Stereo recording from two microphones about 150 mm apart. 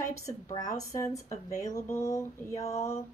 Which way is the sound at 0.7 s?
20° left (ahead or behind).